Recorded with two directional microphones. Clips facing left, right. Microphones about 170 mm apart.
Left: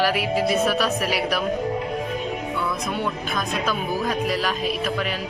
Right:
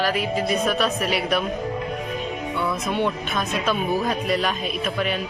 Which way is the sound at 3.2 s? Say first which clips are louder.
Right 1 dB; centre (ahead or behind).